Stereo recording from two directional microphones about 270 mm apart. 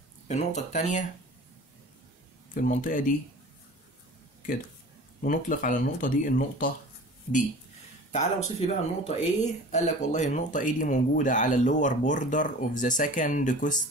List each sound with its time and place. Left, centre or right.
0.3 s speech: left
2.5 s speech: left
5.2 s speech: left
8.1 s speech: left